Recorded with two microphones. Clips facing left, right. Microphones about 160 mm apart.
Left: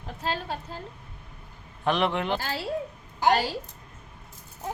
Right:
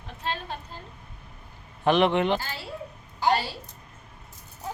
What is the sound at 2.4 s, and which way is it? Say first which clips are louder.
Speech: left 5 dB; 90° left.